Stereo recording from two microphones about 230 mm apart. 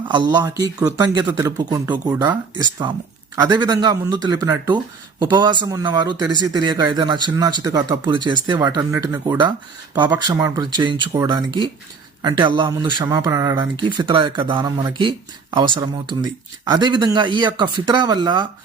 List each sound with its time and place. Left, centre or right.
0.1 s speech: centre